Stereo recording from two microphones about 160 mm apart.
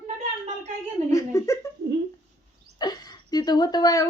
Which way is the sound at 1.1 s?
20° left (ahead or behind).